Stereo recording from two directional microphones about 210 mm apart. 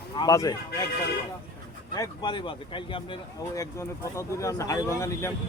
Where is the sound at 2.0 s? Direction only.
20° left (ahead or behind).